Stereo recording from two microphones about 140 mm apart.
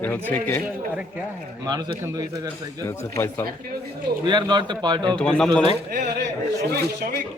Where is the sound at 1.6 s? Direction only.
30° right (ahead or behind).